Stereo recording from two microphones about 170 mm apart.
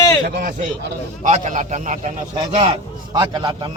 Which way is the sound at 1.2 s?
45° right (ahead or behind).